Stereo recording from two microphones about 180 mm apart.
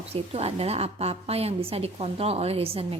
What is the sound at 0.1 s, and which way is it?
A woman's voice, 35° right (ahead or behind).